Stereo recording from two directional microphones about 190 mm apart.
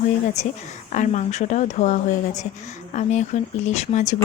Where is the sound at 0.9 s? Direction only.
40° left (ahead or behind).